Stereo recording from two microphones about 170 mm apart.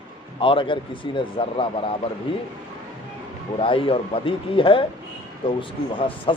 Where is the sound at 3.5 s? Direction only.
30° left (ahead or behind).